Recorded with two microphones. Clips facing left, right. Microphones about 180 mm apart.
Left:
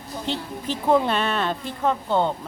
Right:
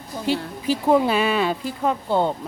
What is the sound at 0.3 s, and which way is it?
Speech, 10° right (ahead or behind).